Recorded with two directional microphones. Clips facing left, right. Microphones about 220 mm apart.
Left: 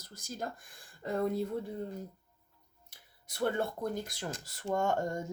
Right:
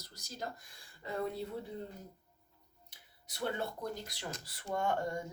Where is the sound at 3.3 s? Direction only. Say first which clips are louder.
Left 5 dB; 50° left (ahead or behind).